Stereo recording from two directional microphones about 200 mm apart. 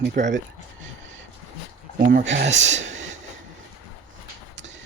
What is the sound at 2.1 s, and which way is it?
Speech, 35° right (ahead or behind).